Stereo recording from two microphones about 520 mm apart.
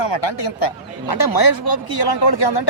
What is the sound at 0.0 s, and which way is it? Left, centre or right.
Speech, left.